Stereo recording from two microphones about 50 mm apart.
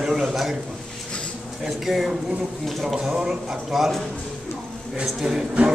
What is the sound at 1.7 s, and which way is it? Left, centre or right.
A man's voice, centre.